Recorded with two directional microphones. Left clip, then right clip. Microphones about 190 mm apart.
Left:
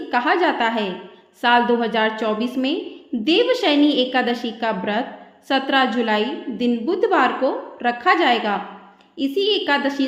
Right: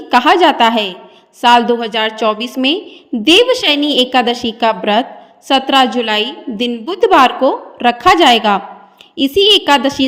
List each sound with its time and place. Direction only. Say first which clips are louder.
0.1 s a woman's voice: right 9 dB; 40° right (ahead or behind)